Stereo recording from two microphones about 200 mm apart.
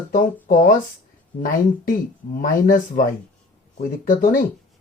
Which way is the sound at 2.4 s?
40° left (ahead or behind).